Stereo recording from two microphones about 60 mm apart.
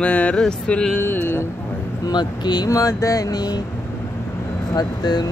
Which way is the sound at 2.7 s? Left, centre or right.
Left.